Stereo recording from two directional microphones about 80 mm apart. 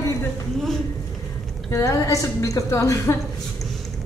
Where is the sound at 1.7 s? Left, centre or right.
Left.